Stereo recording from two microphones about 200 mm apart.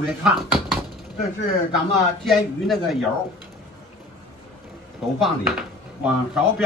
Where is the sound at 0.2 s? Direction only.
5° right (ahead or behind).